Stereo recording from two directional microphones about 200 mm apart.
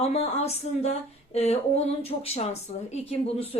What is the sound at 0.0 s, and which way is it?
A woman's voice, 30° left (ahead or behind).